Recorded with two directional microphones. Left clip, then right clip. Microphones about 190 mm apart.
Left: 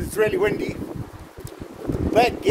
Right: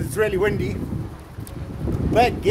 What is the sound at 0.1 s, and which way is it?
Speech, 10° left (ahead or behind).